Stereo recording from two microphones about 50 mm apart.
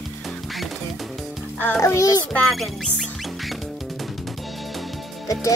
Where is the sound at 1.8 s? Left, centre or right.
Left.